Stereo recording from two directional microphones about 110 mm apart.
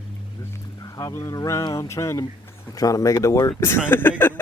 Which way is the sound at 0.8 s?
30° left (ahead or behind).